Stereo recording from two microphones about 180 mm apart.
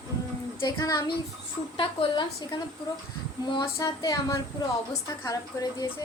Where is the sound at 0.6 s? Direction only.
20° left (ahead or behind).